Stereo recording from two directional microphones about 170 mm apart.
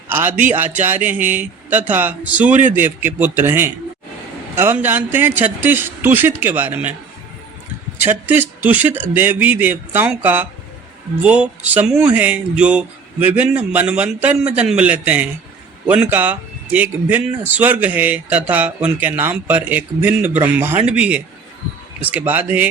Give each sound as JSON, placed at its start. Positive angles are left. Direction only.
{"t": 0.1, "sound": "speech", "side_deg": -10}
{"t": 7.9, "sound": "speech", "side_deg": -10}